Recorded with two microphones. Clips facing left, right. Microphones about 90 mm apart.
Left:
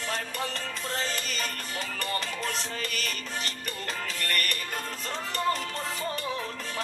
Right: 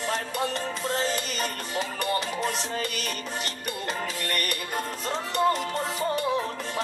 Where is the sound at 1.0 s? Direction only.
20° right (ahead or behind).